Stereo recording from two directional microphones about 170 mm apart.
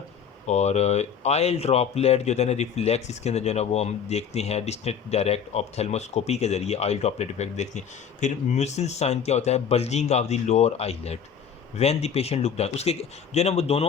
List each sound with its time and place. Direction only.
0.4 s speech: 40° left (ahead or behind)